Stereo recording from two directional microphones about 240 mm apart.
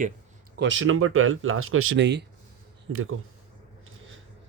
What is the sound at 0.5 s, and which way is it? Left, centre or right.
Speech, right.